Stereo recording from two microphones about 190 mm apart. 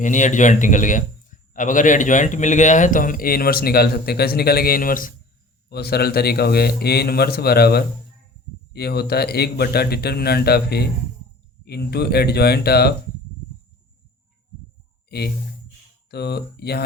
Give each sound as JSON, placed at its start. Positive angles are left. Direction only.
{"t": 0.0, "sound": "a man's voice", "side_deg": 40}
{"t": 16.0, "sound": "speech", "side_deg": 60}